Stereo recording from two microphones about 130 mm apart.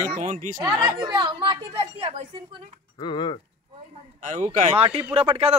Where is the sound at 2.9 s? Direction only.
35° left (ahead or behind).